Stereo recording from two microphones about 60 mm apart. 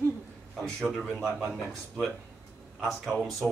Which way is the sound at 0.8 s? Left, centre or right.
Centre.